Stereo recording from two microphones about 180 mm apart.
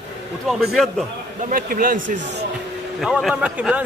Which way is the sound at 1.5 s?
50° right (ahead or behind).